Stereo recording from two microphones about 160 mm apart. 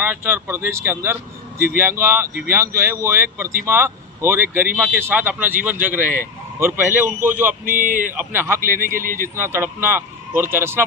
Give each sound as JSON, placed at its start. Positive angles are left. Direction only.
{"t": 0.0, "sound": "speech", "side_deg": -15}
{"t": 7.6, "sound": "a man's voice", "side_deg": -55}
{"t": 8.1, "sound": "speech", "side_deg": -10}
{"t": 8.6, "sound": "a man's voice", "side_deg": -60}
{"t": 9.3, "sound": "speech", "side_deg": -15}